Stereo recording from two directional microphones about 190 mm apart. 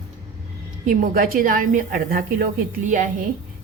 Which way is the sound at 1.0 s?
50° right (ahead or behind).